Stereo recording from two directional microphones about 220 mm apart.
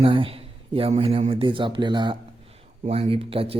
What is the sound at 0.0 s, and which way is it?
A man's voice, 25° right (ahead or behind).